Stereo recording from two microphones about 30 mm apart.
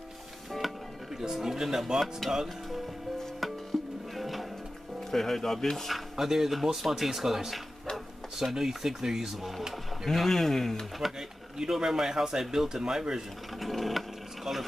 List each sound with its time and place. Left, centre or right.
0.5 s music: centre
1.2 s speech: centre
2.0 s speech: centre
3.7 s music: centre
5.1 s speech: centre
6.1 s speech: centre
10.0 s speech: centre
11.1 s a sound: right
11.7 s speech: centre
13.6 s sewing machine: centre